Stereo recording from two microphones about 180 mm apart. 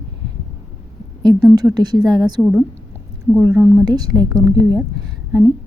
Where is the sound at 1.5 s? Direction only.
20° right (ahead or behind).